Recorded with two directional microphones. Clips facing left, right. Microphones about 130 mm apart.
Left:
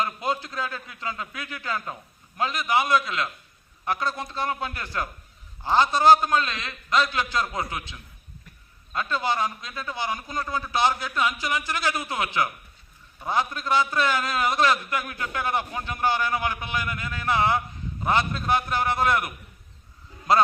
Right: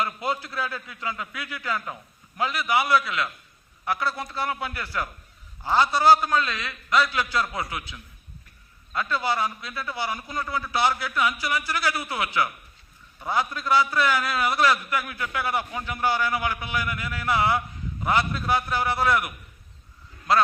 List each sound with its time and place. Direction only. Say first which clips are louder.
0.0 s a man's voice: even; 25° left (ahead or behind)
8.9 s a man's voice: even; 25° left (ahead or behind)